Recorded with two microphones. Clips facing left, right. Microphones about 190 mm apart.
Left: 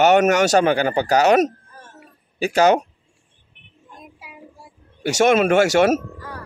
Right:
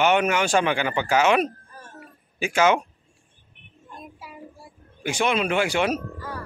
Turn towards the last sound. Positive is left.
turn(degrees=45)  # may be behind; listen again after turning